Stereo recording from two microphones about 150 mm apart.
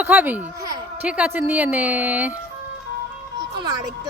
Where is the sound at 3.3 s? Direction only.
30° right (ahead or behind).